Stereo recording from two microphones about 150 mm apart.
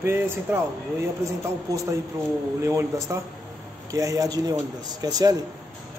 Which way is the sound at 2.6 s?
20° right (ahead or behind).